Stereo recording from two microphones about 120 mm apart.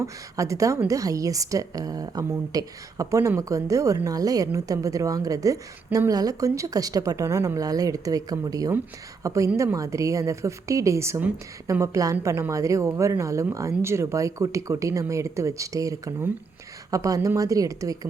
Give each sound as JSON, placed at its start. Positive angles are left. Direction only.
{"t": 0.0, "sound": "a woman's voice", "side_deg": -25}